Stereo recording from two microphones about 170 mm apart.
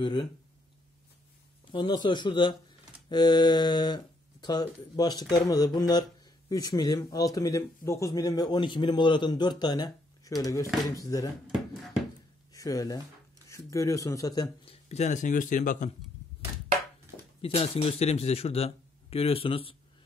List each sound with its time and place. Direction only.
0.0 s speech: 25° left (ahead or behind)
1.7 s speech: 25° left (ahead or behind)
12.5 s speech: 20° left (ahead or behind)
14.6 s speech: 35° left (ahead or behind)
17.4 s speech: 35° left (ahead or behind)